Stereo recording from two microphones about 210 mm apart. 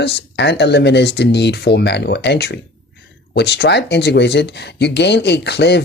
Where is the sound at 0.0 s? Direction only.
55° left (ahead or behind).